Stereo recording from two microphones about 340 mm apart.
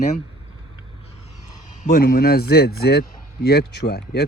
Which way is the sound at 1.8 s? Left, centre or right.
Left.